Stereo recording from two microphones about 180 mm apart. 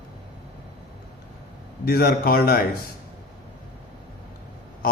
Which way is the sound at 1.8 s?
60° left (ahead or behind).